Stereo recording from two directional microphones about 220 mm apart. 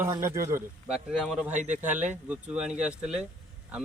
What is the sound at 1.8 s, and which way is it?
Speech, 5° right (ahead or behind).